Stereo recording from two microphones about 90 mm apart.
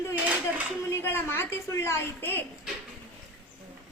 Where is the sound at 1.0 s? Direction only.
25° left (ahead or behind).